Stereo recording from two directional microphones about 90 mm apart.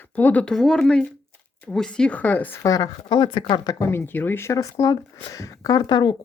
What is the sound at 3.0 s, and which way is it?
Speech, 65° left (ahead or behind).